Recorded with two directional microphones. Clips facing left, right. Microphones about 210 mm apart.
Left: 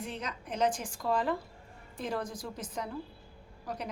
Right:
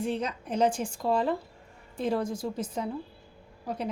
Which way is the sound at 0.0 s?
30° right (ahead or behind).